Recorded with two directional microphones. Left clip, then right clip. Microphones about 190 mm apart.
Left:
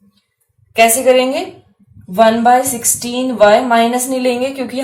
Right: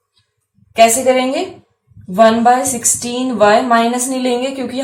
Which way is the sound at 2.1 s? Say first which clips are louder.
Even; 30° left (ahead or behind).